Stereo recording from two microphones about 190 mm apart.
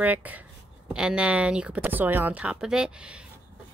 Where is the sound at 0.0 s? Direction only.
10° right (ahead or behind).